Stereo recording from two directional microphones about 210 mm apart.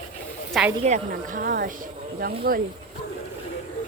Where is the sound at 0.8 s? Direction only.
35° right (ahead or behind).